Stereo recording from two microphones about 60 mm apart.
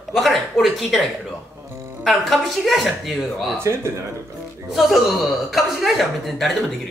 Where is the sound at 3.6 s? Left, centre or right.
Right.